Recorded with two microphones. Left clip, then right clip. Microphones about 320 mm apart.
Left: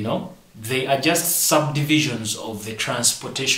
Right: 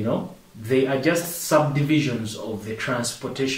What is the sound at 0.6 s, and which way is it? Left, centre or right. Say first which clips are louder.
Speech: left 1 dB; centre.